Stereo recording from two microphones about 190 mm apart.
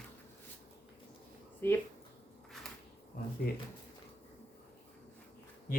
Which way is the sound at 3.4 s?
55° left (ahead or behind).